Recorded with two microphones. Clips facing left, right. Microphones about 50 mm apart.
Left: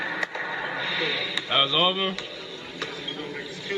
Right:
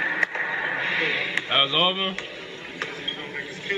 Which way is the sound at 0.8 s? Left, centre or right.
Right.